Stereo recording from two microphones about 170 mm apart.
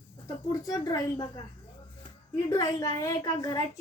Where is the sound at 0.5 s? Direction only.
20° left (ahead or behind).